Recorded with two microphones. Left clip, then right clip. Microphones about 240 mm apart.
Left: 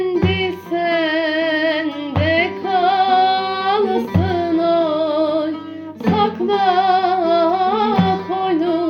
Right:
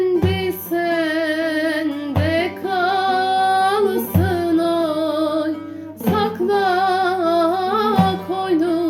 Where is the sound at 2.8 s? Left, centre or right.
Centre.